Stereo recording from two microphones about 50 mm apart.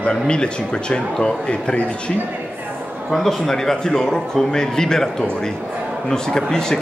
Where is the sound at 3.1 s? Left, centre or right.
Centre.